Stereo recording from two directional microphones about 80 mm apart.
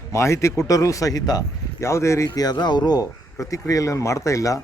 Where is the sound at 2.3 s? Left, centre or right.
Left.